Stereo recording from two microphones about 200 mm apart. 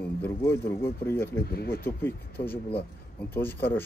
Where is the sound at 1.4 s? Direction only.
50° left (ahead or behind).